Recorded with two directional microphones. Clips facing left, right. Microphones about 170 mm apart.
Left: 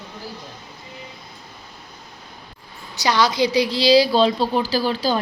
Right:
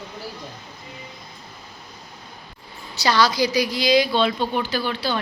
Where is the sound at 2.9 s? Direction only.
15° left (ahead or behind).